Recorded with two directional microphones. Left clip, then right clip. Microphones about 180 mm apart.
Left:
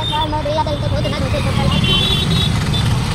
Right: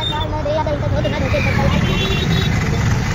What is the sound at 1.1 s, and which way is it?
Vehicle, centre (ahead or behind).